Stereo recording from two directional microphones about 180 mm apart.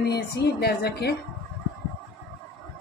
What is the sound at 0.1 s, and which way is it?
Speech, 65° left (ahead or behind).